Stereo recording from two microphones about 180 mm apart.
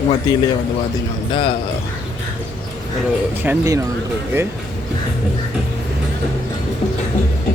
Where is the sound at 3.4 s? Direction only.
15° right (ahead or behind).